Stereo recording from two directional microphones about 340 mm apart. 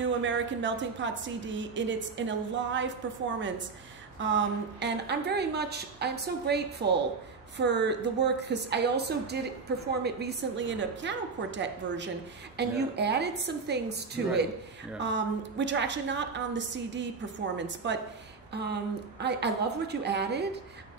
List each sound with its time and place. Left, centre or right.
0.0 s a woman's voice: right